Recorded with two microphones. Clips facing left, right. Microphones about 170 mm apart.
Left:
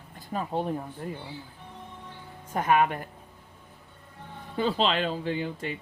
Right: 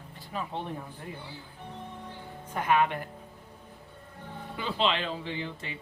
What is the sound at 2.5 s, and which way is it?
Speech, 45° left (ahead or behind).